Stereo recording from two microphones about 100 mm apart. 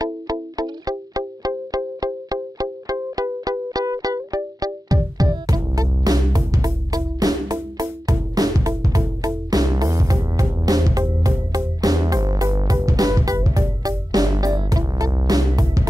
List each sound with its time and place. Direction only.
0.0 s music: 40° right (ahead or behind)